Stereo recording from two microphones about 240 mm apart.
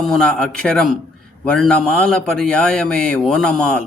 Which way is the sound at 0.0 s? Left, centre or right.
Centre.